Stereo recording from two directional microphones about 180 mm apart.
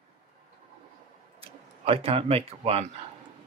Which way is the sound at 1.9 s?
30° right (ahead or behind).